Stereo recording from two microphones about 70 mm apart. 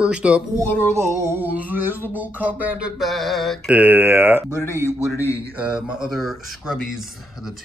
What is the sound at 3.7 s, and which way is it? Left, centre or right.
Speech, right.